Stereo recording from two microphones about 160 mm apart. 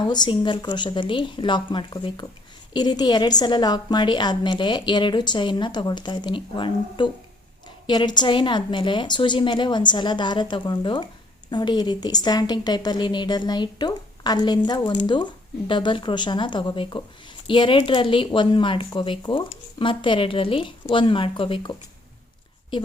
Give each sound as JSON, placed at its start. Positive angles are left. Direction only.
{"t": 0.0, "sound": "a woman's voice", "side_deg": 30}